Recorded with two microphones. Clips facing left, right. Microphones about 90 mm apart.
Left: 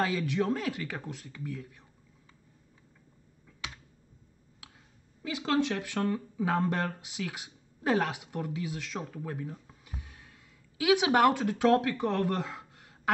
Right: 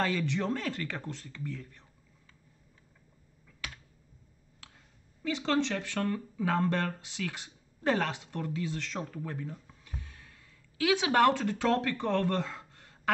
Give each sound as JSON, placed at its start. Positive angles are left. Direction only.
{"t": 0.0, "sound": "speech", "side_deg": 10}
{"t": 3.4, "sound": "finger snapping", "side_deg": 20}
{"t": 5.2, "sound": "speech", "side_deg": 10}